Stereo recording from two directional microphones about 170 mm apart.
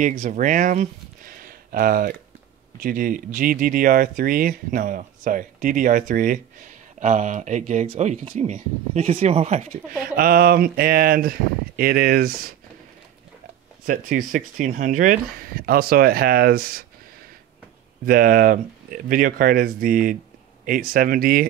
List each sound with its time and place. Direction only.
0.0 s speech: 45° right (ahead or behind)
10.1 s speech: 60° right (ahead or behind)
13.8 s speech: 50° right (ahead or behind)
18.0 s speech: 55° right (ahead or behind)